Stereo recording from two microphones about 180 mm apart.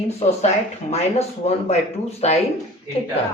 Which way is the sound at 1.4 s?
35° left (ahead or behind).